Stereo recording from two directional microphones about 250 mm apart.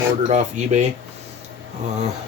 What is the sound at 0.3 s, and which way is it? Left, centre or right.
Speech, right.